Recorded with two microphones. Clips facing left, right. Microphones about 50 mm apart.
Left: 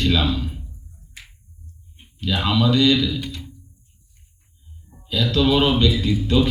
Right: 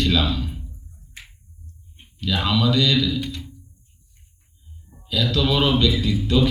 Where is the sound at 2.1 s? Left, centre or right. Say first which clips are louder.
Left 1 dB; left.